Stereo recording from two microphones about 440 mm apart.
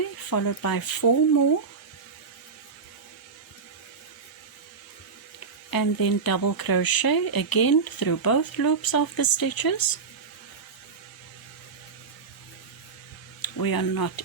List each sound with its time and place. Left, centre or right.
0.0 s speech: left
5.7 s speech: left
13.4 s speech: left